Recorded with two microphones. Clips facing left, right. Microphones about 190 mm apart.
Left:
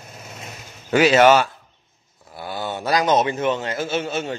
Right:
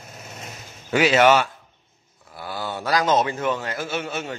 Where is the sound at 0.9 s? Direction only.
40° left (ahead or behind).